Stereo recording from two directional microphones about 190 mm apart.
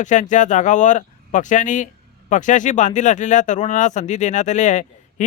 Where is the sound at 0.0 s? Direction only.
40° left (ahead or behind).